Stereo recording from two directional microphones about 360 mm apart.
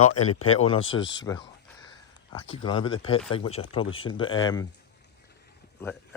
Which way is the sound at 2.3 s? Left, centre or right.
Centre.